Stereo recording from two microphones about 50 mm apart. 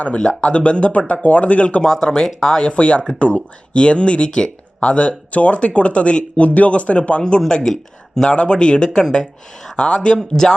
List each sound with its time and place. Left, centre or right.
0.2 s speech: centre
1.8 s speech: centre
2.6 s speech: left
7.2 s speech: centre
8.3 s speech: centre